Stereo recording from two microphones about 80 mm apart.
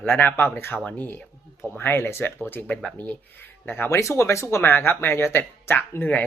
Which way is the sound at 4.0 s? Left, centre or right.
Left.